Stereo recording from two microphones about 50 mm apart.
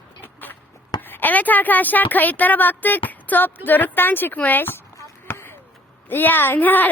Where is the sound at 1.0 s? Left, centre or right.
Left.